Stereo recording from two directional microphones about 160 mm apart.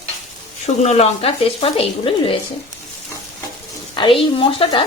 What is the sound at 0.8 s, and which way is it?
Speech, 40° left (ahead or behind).